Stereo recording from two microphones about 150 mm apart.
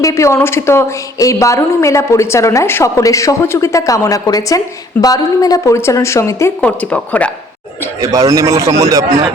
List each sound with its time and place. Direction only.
0.0 s a woman's voice: 20° left (ahead or behind)
8.0 s a man's voice: 20° right (ahead or behind)